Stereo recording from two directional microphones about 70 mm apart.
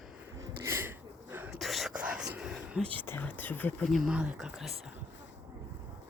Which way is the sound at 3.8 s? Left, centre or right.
Centre.